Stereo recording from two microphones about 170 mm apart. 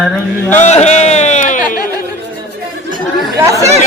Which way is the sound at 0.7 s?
40° left (ahead or behind).